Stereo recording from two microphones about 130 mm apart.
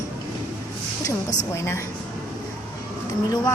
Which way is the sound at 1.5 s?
20° left (ahead or behind).